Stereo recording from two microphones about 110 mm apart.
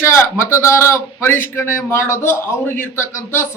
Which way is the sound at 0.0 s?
25° left (ahead or behind).